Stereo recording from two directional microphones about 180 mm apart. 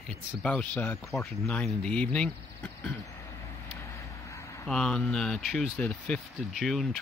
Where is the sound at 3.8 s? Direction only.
15° left (ahead or behind).